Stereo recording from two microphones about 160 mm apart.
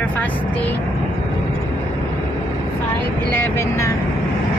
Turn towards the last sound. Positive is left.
turn(degrees=15)  # may be behind; listen again after turning